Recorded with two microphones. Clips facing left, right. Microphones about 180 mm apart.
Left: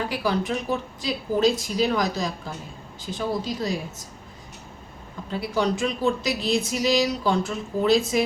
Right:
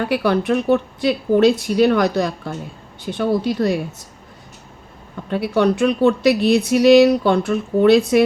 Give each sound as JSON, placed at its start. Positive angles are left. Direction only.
{"t": 0.0, "sound": "speech", "side_deg": -65}
{"t": 5.3, "sound": "speech", "side_deg": -65}